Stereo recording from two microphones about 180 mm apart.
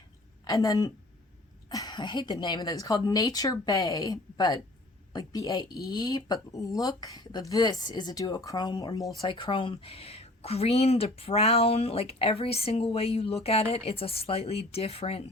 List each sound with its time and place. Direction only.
0.4 s speech: 20° left (ahead or behind); by 15.2 s 35° left (ahead or behind)